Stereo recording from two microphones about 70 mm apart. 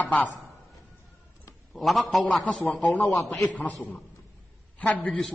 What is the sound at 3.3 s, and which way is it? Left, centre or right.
Speech, left.